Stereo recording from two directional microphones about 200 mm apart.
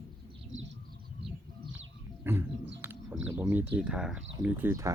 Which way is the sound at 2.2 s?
10° right (ahead or behind).